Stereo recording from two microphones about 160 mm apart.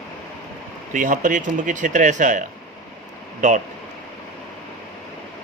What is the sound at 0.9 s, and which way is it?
Speech, 55° right (ahead or behind).